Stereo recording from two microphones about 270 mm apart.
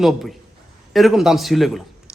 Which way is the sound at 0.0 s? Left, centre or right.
Centre.